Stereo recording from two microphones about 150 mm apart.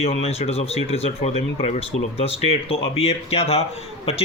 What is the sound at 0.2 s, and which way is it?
Speech, 45° left (ahead or behind).